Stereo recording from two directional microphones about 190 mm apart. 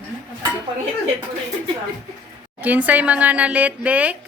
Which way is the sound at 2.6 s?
10° right (ahead or behind).